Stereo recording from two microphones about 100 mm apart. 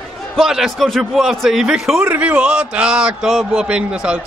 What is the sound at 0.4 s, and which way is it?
A man's voice, 5° right (ahead or behind).